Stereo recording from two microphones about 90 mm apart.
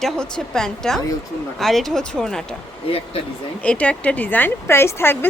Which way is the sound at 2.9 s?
90° left.